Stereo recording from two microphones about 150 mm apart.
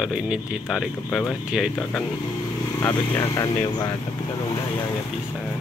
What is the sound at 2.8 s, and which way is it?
Speech, 20° left (ahead or behind).